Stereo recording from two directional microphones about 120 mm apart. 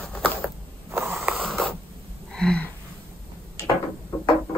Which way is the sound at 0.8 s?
20° right (ahead or behind).